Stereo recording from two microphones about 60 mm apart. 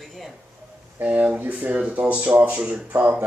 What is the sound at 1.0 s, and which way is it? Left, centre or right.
Speech, right.